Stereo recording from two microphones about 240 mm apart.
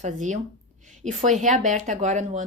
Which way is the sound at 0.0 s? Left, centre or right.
Right.